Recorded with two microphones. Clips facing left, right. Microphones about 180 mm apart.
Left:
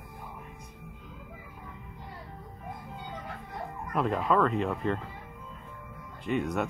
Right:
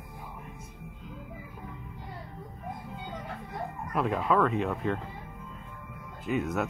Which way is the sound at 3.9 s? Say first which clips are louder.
Even; centre (ahead or behind).